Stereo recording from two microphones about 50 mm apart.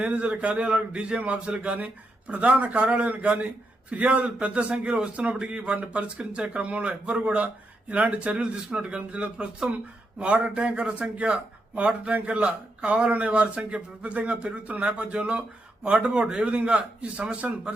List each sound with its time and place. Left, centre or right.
0.0 s a man's voice: right